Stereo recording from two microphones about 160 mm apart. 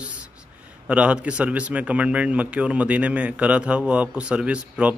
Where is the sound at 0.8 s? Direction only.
5° right (ahead or behind).